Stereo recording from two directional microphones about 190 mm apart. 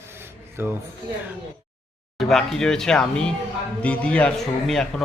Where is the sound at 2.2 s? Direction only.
Centre (ahead or behind).